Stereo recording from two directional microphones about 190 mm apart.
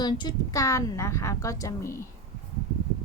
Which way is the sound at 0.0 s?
25° left (ahead or behind).